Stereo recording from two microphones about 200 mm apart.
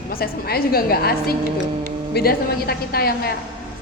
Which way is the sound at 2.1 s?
50° left (ahead or behind).